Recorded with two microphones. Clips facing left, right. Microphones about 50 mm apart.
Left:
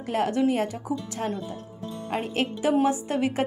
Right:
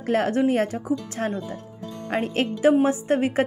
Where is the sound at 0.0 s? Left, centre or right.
Right.